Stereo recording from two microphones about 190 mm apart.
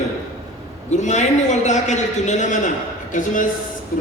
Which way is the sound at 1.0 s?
40° left (ahead or behind).